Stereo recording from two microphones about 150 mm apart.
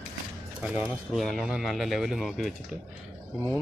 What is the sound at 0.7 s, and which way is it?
Speech, 10° right (ahead or behind).